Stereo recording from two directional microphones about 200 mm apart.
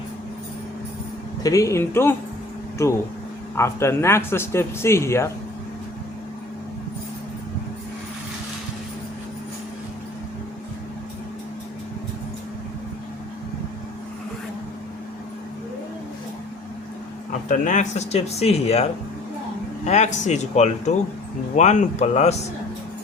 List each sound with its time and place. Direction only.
1.4 s a man's voice: 15° left (ahead or behind)
3.6 s a man's voice: 15° left (ahead or behind)
17.5 s speech: 40° left (ahead or behind)